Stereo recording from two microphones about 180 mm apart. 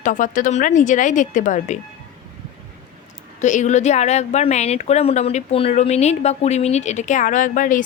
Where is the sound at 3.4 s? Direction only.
40° left (ahead or behind).